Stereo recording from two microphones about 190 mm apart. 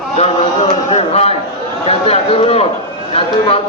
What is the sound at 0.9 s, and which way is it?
A man's voice, 35° left (ahead or behind).